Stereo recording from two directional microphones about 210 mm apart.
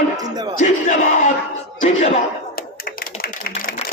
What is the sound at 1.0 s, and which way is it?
Crowd, 35° left (ahead or behind).